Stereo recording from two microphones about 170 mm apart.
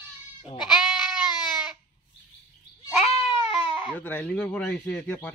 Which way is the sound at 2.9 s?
5° right (ahead or behind).